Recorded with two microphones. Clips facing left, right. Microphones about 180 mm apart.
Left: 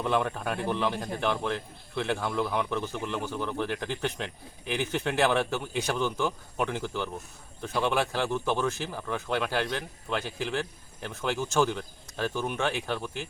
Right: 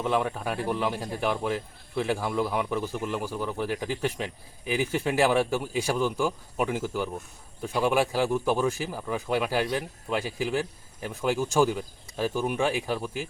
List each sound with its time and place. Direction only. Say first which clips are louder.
0.0 s speech: right 1 dB; 5° right (ahead or behind)